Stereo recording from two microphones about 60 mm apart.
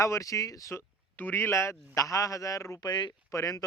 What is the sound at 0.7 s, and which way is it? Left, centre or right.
Speech, left.